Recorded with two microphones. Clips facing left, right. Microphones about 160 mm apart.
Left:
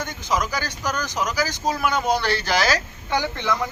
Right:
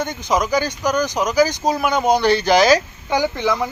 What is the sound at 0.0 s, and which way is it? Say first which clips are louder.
Speech: right 5 dB; 20° right (ahead or behind).